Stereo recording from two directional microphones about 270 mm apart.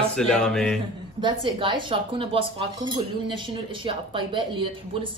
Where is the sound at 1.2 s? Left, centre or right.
Centre.